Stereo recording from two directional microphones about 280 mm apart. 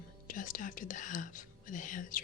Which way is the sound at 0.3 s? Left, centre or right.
Left.